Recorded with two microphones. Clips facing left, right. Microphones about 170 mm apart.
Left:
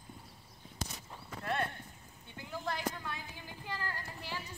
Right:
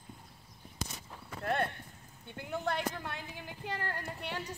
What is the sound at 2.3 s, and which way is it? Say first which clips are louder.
A woman's voice: right 4 dB; 60° right (ahead or behind).